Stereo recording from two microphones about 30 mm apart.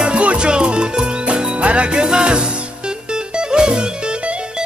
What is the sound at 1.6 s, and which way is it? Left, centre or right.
Music, right.